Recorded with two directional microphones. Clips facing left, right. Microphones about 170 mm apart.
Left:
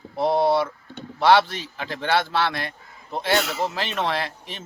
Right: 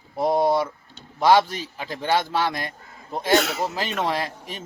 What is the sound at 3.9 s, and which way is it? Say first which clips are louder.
Speech: even; 10° right (ahead or behind).